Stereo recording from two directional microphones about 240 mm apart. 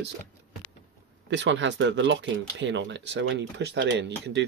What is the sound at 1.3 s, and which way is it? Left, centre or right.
Speech, right.